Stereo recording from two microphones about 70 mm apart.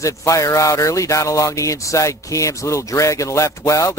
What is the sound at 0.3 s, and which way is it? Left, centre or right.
Speech, left.